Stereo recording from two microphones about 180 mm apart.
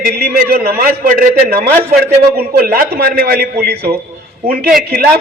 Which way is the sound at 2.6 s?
55° right (ahead or behind).